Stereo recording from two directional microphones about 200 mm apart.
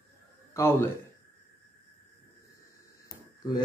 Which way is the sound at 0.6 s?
15° left (ahead or behind).